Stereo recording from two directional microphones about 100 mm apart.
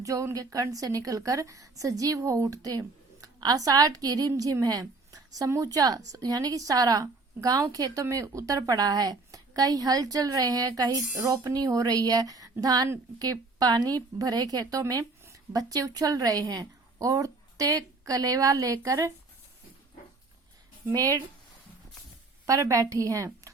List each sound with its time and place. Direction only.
0.0 s a woman's voice: 35° right (ahead or behind)
20.9 s a woman's voice: 40° right (ahead or behind)
22.4 s a woman's voice: 35° right (ahead or behind)